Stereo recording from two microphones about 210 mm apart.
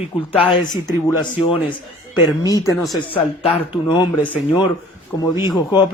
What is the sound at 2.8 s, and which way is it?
Speech, centre (ahead or behind).